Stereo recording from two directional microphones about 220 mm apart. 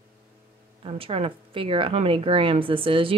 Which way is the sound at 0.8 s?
25° right (ahead or behind).